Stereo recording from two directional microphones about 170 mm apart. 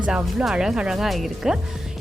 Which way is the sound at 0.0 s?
5° right (ahead or behind).